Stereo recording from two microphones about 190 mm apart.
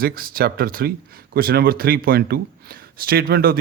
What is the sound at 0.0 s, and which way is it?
A man's voice, 50° right (ahead or behind).